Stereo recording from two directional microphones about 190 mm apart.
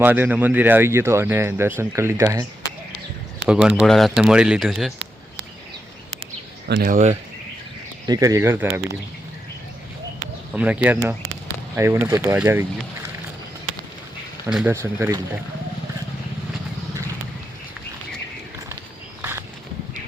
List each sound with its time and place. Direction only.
0.0 s speech: 10° right (ahead or behind)
3.4 s speech: 5° right (ahead or behind)
6.7 s speech: 50° right (ahead or behind)
8.0 s speech: 20° right (ahead or behind)
10.5 s speech: 5° right (ahead or behind)
14.4 s speech: 10° right (ahead or behind)
19.2 s a sound: 10° right (ahead or behind)